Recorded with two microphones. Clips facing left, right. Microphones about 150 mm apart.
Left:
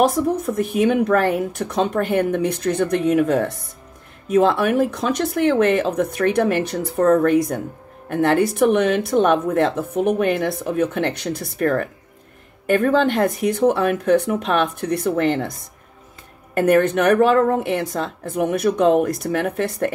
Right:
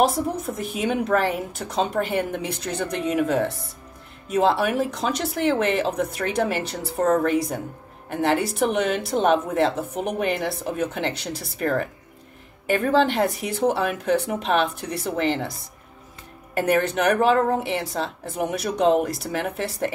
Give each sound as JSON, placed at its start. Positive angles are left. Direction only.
{"t": 0.1, "sound": "speech", "side_deg": 55}
{"t": 16.5, "sound": "speech", "side_deg": 50}